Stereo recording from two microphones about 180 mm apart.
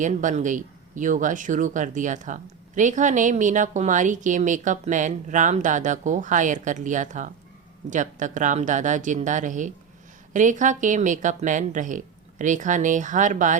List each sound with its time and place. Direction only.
0.0 s speech: 45° right (ahead or behind)